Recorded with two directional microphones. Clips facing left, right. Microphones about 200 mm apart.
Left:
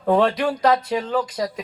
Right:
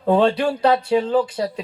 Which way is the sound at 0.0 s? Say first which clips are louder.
Right 2 dB; 30° right (ahead or behind).